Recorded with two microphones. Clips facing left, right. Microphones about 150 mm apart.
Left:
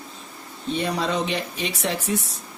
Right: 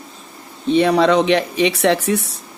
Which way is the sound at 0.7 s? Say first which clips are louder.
Right 11 dB; 80° right.